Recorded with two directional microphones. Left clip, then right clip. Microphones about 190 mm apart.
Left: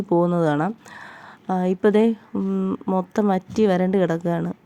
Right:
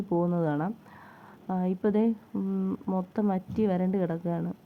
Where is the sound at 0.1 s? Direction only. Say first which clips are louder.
Left 9 dB; 45° left (ahead or behind).